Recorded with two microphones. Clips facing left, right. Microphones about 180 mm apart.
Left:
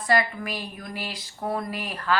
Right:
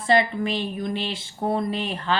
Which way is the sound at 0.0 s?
25° right (ahead or behind).